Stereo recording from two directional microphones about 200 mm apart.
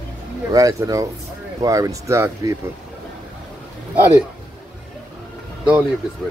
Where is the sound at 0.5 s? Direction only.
15° right (ahead or behind).